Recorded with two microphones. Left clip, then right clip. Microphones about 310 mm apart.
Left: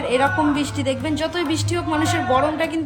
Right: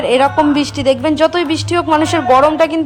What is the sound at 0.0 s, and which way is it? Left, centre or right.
A woman's voice, centre.